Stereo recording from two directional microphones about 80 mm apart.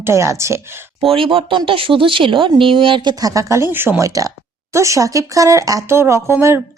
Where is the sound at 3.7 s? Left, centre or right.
Right.